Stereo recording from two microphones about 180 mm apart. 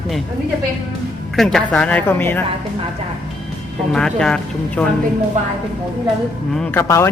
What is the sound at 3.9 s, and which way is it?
Speech, 5° left (ahead or behind).